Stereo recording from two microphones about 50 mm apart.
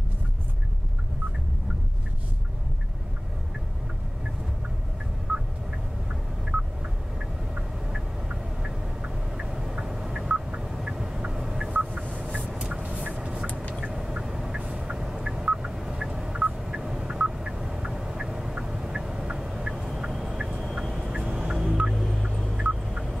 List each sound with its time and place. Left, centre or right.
5.3 s a sound: centre
7.2 s a sound: centre
11.7 s vehicle: right
13.8 s a sound: centre
14.6 s vehicle: centre
16.5 s a sound: centre
19.7 s fowl: centre
20.1 s fowl: centre
20.6 s vehicle: centre
21.1 s music: centre
21.9 s music: centre
22.5 s turkey: centre